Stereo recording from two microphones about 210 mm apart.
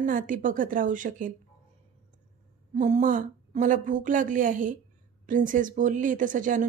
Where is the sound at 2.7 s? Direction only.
35° right (ahead or behind).